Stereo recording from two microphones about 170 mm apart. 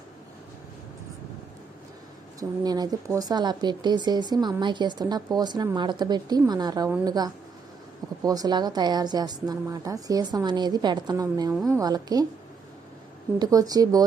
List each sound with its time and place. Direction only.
2.4 s a woman's voice: 25° right (ahead or behind)
13.4 s a woman's voice: 20° right (ahead or behind)